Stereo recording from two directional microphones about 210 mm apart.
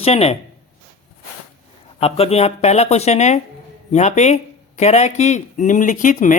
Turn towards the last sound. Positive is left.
turn(degrees=40)  # may be behind; listen again after turning